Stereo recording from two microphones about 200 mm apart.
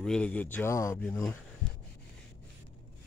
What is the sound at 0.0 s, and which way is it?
Speech, 5° left (ahead or behind).